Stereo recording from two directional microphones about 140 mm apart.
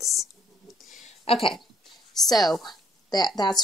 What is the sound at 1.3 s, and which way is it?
Speech, 45° left (ahead or behind).